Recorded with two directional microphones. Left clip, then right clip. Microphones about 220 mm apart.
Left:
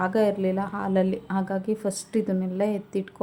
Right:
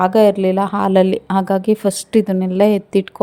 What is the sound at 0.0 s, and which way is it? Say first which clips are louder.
Speech: right 11 dB; 35° right (ahead or behind).